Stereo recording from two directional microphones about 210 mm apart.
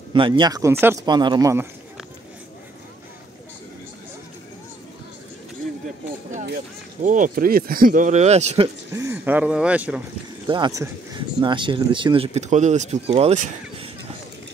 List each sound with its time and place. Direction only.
0.1 s speech: 20° right (ahead or behind)
6.4 s speech: 40° right (ahead or behind)
8.9 s speech: 10° right (ahead or behind)
10.4 s speech: 20° right (ahead or behind)